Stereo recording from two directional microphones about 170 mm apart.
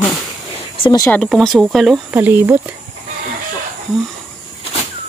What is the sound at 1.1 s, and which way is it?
Speech, centre (ahead or behind).